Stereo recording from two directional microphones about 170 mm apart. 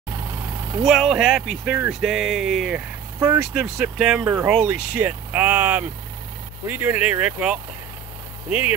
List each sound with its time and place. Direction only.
0.8 s speech: centre (ahead or behind)